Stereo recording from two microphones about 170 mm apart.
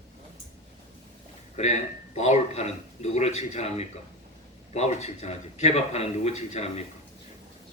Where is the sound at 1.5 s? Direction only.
40° left (ahead or behind).